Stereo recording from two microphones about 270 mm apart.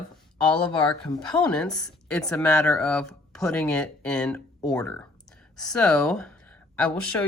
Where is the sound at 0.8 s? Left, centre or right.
Centre.